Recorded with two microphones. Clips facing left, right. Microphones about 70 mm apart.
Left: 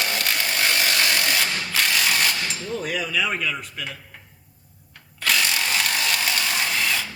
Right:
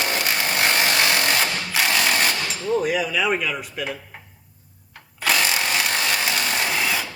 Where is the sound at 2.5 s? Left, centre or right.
Centre.